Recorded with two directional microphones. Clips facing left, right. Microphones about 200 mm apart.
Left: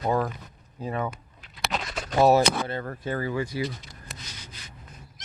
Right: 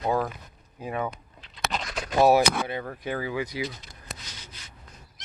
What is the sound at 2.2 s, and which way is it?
Speech, 10° right (ahead or behind).